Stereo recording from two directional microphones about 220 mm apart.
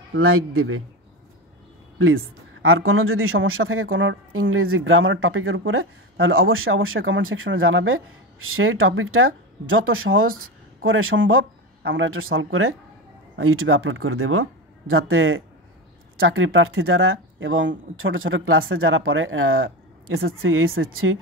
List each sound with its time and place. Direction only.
0.1 s a woman's voice: 80° right
2.6 s a woman's voice: 70° right (ahead or behind)